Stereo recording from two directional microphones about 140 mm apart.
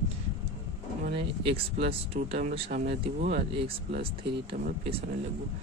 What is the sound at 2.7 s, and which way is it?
Speech, 70° right (ahead or behind).